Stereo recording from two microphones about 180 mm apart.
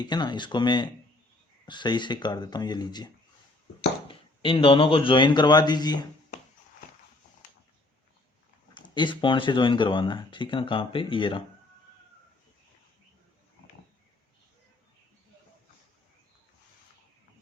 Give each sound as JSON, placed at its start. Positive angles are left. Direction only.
{"t": 0.0, "sound": "speech", "side_deg": 25}
{"t": 4.1, "sound": "speech", "side_deg": 30}
{"t": 8.7, "sound": "speech", "side_deg": 25}